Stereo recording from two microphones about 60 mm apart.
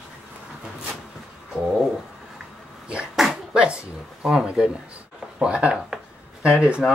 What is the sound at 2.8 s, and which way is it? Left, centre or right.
Sneeze, centre.